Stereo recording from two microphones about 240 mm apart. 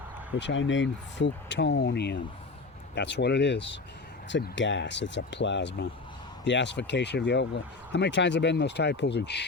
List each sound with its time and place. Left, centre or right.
0.3 s speech: left